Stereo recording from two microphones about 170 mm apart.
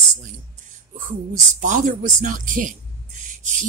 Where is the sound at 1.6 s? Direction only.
50° right (ahead or behind).